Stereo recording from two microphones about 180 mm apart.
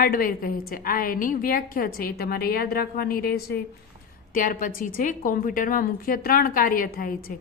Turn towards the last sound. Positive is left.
turn(degrees=55)  # may be behind; listen again after turning